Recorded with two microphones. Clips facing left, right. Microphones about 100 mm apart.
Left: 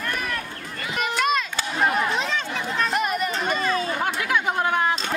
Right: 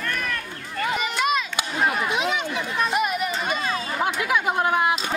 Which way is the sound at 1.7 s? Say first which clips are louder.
Left 1 dB; centre (ahead or behind).